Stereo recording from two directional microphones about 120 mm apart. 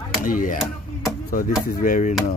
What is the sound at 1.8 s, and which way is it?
Speech, 90° left.